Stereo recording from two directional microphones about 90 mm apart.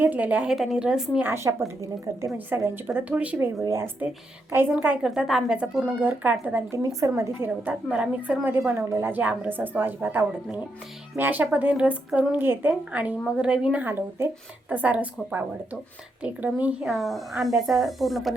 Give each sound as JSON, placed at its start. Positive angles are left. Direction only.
{"t": 0.0, "sound": "speech", "side_deg": -15}
{"t": 0.5, "sound": "speech", "side_deg": -5}
{"t": 1.2, "sound": "speech", "side_deg": -30}
{"t": 3.6, "sound": "speech", "side_deg": -30}
{"t": 5.0, "sound": "speech", "side_deg": -5}
{"t": 6.7, "sound": "speech", "side_deg": -35}
{"t": 7.9, "sound": "speech", "side_deg": -10}
{"t": 8.4, "sound": "speech", "side_deg": -20}
{"t": 13.8, "sound": "speech", "side_deg": -25}
{"t": 16.8, "sound": "speech", "side_deg": 0}